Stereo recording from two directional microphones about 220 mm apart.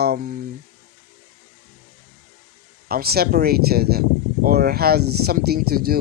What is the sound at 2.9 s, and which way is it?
Speech, 45° right (ahead or behind).